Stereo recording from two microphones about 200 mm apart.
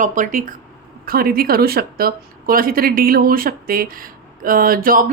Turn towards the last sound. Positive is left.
turn(degrees=-45)  # may be behind; listen again after turning